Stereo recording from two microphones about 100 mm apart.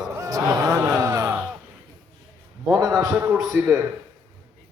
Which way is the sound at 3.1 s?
20° right (ahead or behind).